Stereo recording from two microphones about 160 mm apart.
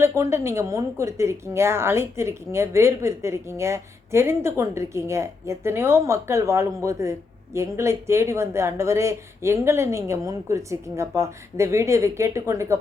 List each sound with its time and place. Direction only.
0.0 s speech: 15° right (ahead or behind)